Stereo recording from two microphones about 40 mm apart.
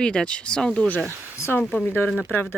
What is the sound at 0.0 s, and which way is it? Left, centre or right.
Speech, left.